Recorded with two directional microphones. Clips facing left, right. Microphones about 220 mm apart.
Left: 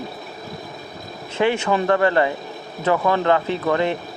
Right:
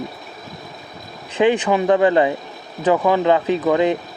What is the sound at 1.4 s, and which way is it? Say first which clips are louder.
Speech: right 3 dB; 15° right (ahead or behind).